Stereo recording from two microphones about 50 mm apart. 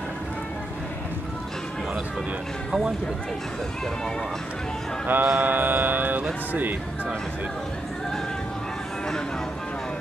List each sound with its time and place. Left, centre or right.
5.0 s speech: right